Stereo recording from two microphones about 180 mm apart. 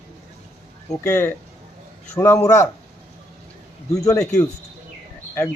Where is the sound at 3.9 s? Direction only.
20° left (ahead or behind).